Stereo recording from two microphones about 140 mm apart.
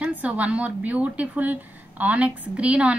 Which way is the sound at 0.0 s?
10° right (ahead or behind).